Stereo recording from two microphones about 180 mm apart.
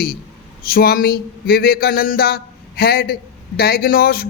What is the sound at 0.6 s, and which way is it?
A man's voice, 55° left (ahead or behind).